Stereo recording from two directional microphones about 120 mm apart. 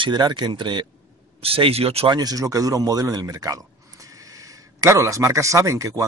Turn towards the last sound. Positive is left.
turn(degrees=-25)  # may be behind; listen again after turning